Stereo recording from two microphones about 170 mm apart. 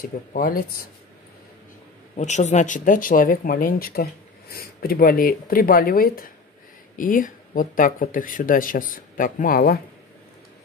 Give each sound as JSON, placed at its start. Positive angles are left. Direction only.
{"t": 0.0, "sound": "speech", "side_deg": 55}
{"t": 2.1, "sound": "speech", "side_deg": 45}